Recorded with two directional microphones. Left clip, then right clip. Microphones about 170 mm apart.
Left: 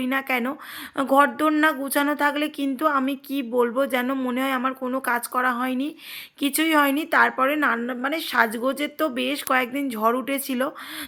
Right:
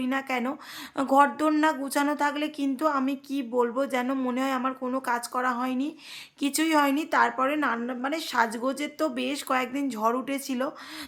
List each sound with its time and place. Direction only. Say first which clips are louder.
0.0 s speech: left 4 dB; 15° left (ahead or behind)